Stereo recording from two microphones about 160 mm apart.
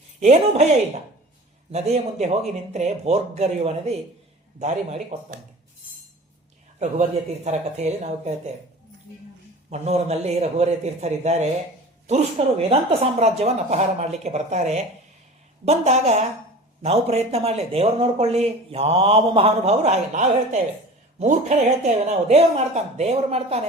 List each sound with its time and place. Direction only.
0.2 s speech: 45° right (ahead or behind)
7.4 s speech: 45° right (ahead or behind)
9.6 s speech: 45° right (ahead or behind)